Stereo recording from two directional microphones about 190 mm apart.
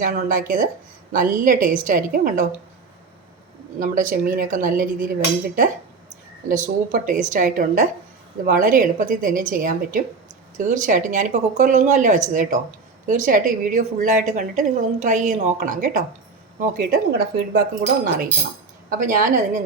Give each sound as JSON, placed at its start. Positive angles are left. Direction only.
{"t": 0.0, "sound": "a woman's voice", "side_deg": -45}
{"t": 3.8, "sound": "a woman's voice", "side_deg": -45}
{"t": 6.5, "sound": "a woman's voice", "side_deg": -45}